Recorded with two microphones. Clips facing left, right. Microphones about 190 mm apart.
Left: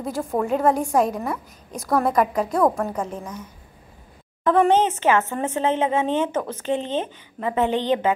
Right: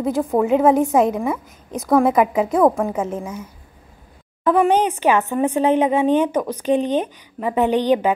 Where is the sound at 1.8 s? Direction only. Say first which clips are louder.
Right 5 dB; 5° right (ahead or behind).